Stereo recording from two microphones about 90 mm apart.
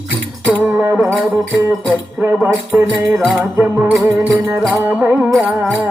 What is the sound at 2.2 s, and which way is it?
Music, 20° right (ahead or behind).